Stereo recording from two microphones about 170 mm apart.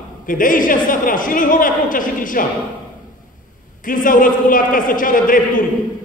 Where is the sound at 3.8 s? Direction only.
55° left (ahead or behind).